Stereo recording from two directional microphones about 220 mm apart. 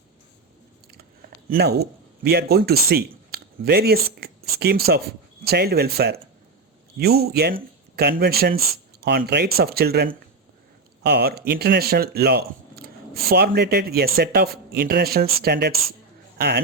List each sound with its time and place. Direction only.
1.5 s speech: 45° right (ahead or behind)